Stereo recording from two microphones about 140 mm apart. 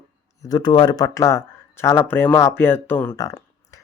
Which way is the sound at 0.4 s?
30° left (ahead or behind).